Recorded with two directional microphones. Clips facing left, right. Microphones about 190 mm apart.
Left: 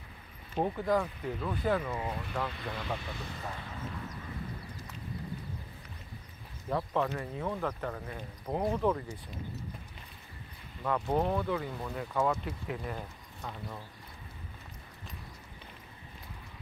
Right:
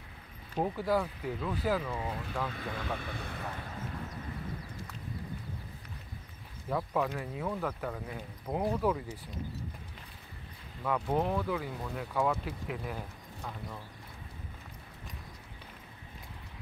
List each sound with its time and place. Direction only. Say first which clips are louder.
0.6 s speech: left 1 dB; 5° right (ahead or behind)
2.0 s speech: left 1 dB; 10° left (ahead or behind)
2.5 s speech: even; 55° right (ahead or behind)
6.7 s speech: even; 5° right (ahead or behind)
10.8 s speech: left 1 dB; centre (ahead or behind)